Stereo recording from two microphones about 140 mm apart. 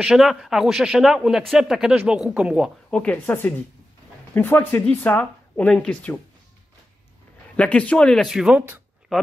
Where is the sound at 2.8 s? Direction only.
10° left (ahead or behind).